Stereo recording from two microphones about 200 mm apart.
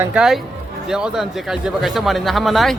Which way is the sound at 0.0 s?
5° right (ahead or behind).